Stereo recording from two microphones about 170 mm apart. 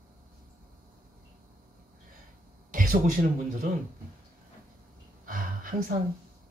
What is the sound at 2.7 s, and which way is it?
Speech, 55° right (ahead or behind).